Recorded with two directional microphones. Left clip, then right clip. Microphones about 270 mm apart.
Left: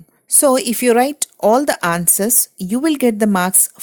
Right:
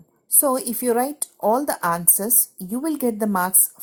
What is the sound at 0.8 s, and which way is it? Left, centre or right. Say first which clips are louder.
Speech: left 7 dB; left.